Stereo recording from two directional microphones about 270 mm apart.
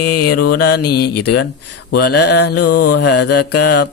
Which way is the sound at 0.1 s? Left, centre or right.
Left.